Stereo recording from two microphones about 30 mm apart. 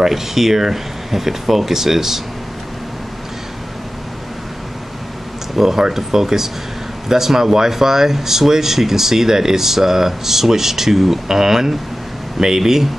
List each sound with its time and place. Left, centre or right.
0.0 s speech: centre
5.6 s speech: centre